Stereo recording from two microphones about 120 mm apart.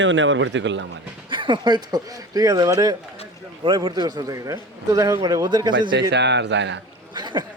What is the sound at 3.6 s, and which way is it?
A man's voice, 45° right (ahead or behind).